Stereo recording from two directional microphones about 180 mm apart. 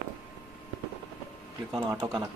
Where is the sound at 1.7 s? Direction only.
20° right (ahead or behind).